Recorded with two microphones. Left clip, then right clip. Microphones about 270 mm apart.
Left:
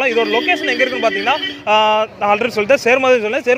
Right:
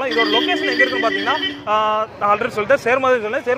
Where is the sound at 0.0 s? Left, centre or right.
Left.